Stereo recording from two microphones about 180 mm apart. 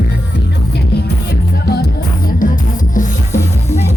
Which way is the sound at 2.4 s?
45° left (ahead or behind).